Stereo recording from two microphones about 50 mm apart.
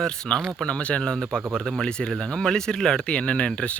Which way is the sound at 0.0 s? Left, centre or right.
Centre.